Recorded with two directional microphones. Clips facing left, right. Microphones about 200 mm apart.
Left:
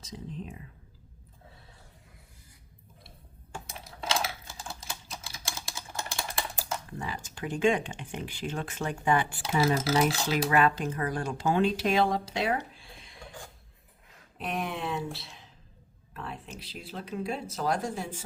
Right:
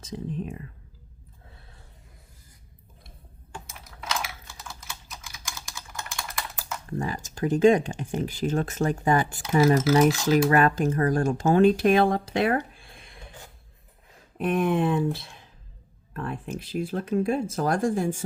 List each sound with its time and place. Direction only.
0.0 s speech: 55° right (ahead or behind)
3.8 s typing: 30° left (ahead or behind)
6.9 s speech: 45° right (ahead or behind)
14.3 s speech: 50° right (ahead or behind)